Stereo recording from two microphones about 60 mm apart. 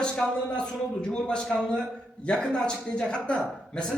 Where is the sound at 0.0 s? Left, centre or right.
Centre.